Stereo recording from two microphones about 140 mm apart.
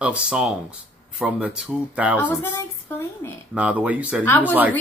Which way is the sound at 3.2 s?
15° left (ahead or behind).